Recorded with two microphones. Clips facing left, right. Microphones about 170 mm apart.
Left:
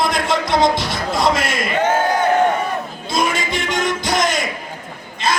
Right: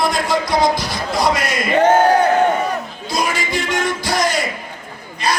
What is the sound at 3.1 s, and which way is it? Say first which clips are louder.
Music: left 1 dB; 20° left (ahead or behind).